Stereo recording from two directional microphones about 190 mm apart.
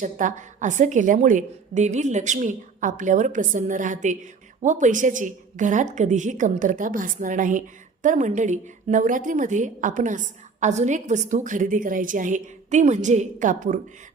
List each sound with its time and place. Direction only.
0.0 s a woman's voice: 40° right (ahead or behind)